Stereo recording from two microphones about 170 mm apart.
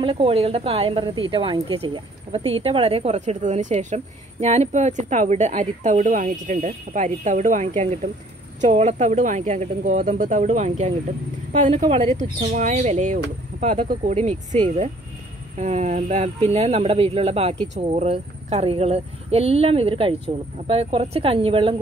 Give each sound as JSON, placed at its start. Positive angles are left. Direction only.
{"t": 0.0, "sound": "speech", "side_deg": -35}